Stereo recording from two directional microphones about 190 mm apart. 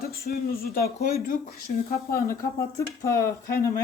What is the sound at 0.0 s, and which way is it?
A woman's voice, 50° left (ahead or behind).